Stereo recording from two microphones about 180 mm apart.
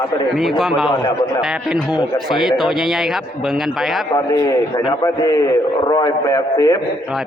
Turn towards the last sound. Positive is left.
turn(degrees=20)  # may be behind; listen again after turning